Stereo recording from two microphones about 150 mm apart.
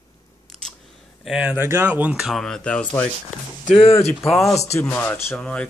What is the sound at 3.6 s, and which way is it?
Speech, 40° left (ahead or behind).